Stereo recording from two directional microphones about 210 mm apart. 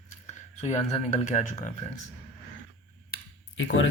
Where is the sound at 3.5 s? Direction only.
65° left (ahead or behind).